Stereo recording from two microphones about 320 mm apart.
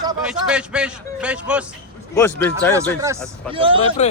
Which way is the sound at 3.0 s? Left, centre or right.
Centre.